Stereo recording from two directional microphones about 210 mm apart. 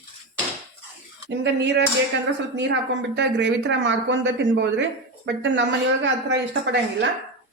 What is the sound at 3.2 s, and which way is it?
Speech, 55° right (ahead or behind).